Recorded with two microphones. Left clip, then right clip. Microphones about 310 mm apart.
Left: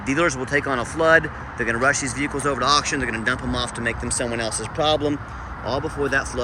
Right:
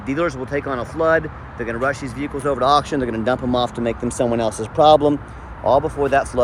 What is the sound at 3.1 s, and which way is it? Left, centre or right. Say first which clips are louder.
Speech: right 4 dB; right.